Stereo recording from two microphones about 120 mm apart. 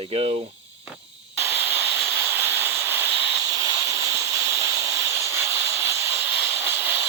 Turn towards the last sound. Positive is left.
turn(degrees=-20)  # may be behind; listen again after turning